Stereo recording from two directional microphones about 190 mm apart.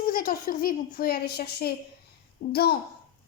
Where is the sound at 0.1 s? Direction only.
50° left (ahead or behind).